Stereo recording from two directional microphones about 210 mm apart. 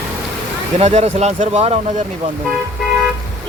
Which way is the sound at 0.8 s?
30° right (ahead or behind).